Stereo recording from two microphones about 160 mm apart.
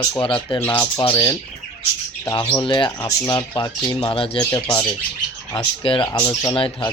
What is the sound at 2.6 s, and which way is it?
Speech, 25° left (ahead or behind).